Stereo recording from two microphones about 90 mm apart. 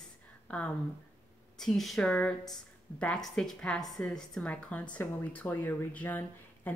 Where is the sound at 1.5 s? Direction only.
5° left (ahead or behind).